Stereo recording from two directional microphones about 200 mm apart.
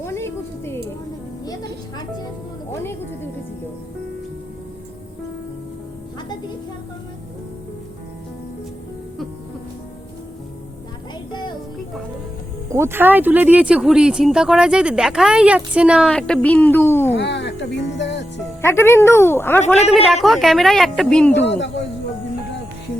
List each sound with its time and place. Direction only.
0.0 s music: 15° left (ahead or behind)
12.7 s speech: 10° right (ahead or behind); by 17.1 s 10° left (ahead or behind)
17.2 s speech: 60° left (ahead or behind)
18.6 s a woman's voice: 10° left (ahead or behind)
20.2 s speech: centre (ahead or behind)
21.4 s a man's voice: 60° left (ahead or behind)